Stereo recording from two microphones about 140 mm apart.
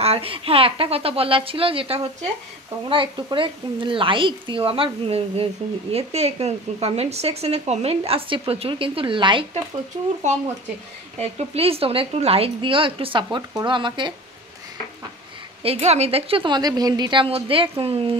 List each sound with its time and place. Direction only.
0.0 s a woman's voice: 45° right (ahead or behind)
10.3 s speech: 60° right (ahead or behind)
11.1 s a woman's voice: 45° right (ahead or behind)
15.6 s a woman's voice: 45° right (ahead or behind)